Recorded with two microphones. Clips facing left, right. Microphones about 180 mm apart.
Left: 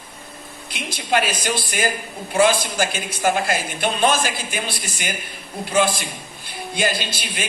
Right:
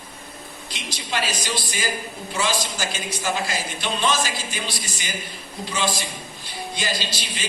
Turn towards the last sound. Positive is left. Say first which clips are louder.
# left 2 dB
turn(degrees=55)  # may be behind; listen again after turning